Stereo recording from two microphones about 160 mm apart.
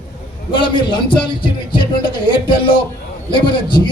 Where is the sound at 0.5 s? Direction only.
30° left (ahead or behind).